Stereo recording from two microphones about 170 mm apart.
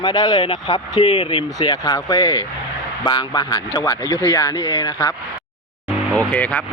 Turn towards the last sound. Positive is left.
turn(degrees=10)  # may be behind; listen again after turning